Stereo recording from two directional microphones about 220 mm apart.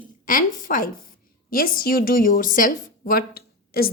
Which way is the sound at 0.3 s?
40° left (ahead or behind).